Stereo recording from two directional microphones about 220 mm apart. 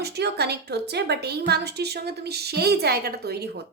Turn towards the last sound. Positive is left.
turn(degrees=-45)  # may be behind; listen again after turning